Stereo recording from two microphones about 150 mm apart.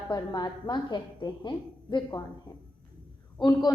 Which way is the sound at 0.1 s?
25° left (ahead or behind).